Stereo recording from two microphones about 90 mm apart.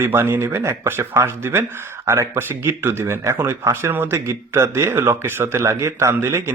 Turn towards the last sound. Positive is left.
turn(degrees=-30)  # may be behind; listen again after turning